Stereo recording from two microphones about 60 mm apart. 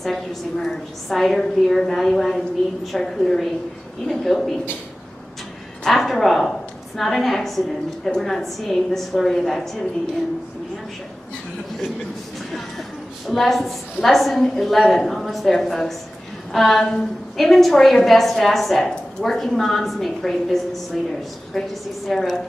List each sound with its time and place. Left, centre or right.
0.0 s a woman's voice: centre
5.9 s a woman's voice: centre
13.3 s a woman's voice: centre